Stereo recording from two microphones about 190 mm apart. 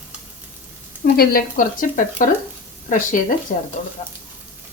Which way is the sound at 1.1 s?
50° left (ahead or behind).